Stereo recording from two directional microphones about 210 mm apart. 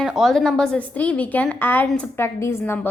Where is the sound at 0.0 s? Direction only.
Centre (ahead or behind).